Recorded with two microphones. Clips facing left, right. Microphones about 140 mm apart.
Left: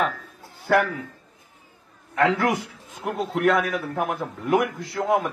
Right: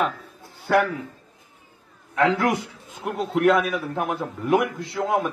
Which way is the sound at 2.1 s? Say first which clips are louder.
Right 1 dB; centre (ahead or behind).